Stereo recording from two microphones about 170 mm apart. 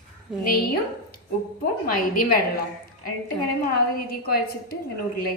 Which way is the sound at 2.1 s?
55° left (ahead or behind).